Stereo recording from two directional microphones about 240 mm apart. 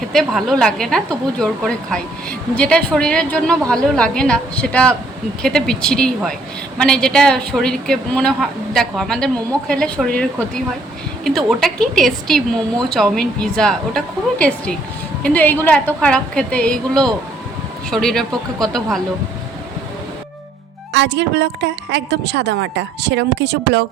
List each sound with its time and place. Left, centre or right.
0.1 s a woman's voice: centre
20.9 s a woman's voice: right